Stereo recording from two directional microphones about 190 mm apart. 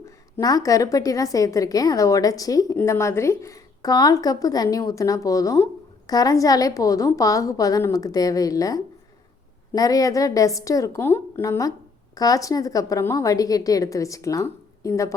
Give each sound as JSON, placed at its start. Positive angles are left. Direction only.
{"t": 0.3, "sound": "a woman's voice", "side_deg": 20}